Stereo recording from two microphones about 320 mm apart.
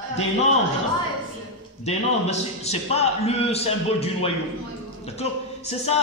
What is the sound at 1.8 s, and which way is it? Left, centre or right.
A man's voice, centre.